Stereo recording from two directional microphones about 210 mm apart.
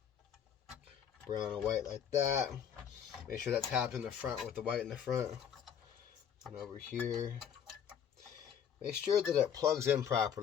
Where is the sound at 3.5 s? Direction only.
5° right (ahead or behind).